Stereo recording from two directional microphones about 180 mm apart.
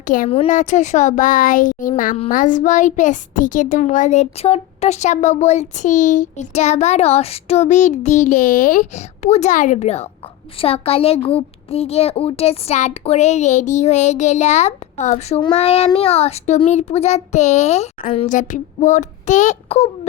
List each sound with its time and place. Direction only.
0.0 s a woman's voice: 50° left (ahead or behind)
0.3 s a child's voice: 30° left (ahead or behind)
0.5 s a sound: 40° left (ahead or behind)
2.3 s a child's voice: 45° left (ahead or behind)
18.3 s a child's voice: 45° left (ahead or behind)